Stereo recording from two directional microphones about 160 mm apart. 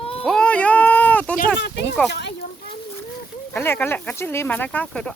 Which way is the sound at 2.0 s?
90° left.